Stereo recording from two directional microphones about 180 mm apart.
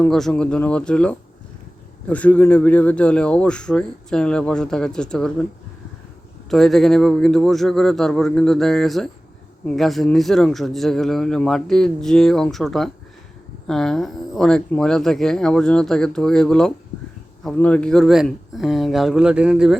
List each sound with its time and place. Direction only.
0.0 s speech: centre (ahead or behind)
6.5 s speech: centre (ahead or behind)